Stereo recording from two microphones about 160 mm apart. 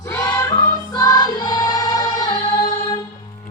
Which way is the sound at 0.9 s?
25° left (ahead or behind).